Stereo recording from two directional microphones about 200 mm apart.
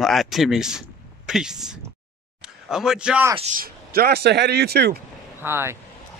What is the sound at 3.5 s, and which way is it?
Speech, 50° right (ahead or behind).